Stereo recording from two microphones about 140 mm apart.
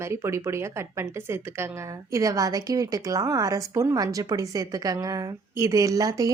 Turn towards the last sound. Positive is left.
turn(degrees=-25)  # may be behind; listen again after turning